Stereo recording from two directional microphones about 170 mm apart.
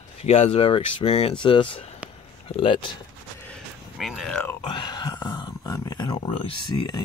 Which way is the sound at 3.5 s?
Centre (ahead or behind).